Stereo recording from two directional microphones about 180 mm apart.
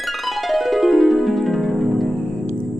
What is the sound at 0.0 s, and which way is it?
Music, centre (ahead or behind).